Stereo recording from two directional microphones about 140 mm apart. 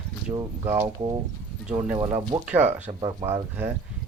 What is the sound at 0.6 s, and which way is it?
Speech, 20° right (ahead or behind).